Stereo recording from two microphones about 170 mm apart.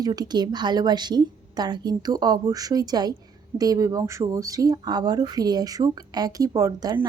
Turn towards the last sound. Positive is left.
turn(degrees=-20)  # may be behind; listen again after turning